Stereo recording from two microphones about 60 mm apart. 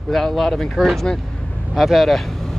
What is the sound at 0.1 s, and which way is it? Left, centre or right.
Speech, centre.